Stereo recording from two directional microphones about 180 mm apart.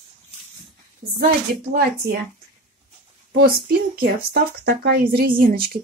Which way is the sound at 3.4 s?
60° right (ahead or behind).